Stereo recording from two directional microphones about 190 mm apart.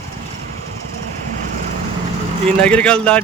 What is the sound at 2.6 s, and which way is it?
Speech, 5° left (ahead or behind).